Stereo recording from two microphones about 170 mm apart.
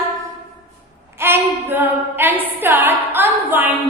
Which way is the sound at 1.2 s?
10° right (ahead or behind).